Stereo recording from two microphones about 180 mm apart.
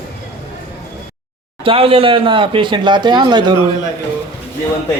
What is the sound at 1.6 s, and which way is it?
Speech, 30° right (ahead or behind).